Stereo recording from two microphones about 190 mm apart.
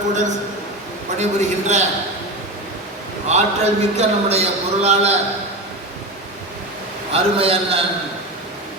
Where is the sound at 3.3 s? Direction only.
35° right (ahead or behind).